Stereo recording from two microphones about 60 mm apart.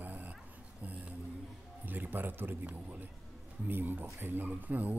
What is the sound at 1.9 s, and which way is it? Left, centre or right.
A woman's voice, right.